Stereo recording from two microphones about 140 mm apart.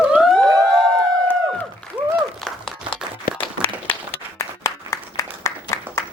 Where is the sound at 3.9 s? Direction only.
20° left (ahead or behind).